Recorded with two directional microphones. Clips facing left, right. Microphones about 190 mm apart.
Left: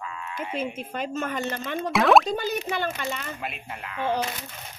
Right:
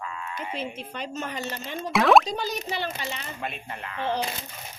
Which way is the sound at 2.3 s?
50° left (ahead or behind).